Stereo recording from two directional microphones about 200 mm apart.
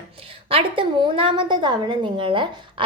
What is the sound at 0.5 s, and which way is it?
A woman's voice, 25° right (ahead or behind).